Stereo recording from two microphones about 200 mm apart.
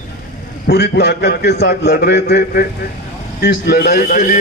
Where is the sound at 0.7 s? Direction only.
55° left (ahead or behind).